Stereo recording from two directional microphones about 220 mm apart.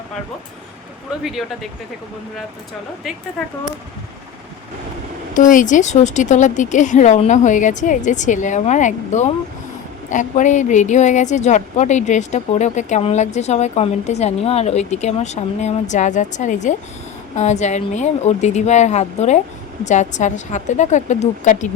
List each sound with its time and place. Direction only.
1.2 s speech: centre (ahead or behind)
3.4 s speech: centre (ahead or behind)
5.3 s a woman's voice: 35° left (ahead or behind)